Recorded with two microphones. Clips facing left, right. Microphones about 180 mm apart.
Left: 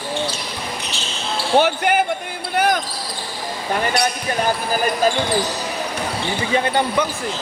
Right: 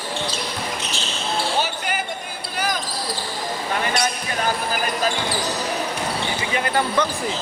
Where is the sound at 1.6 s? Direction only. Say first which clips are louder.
Left 8 dB; 60° left (ahead or behind).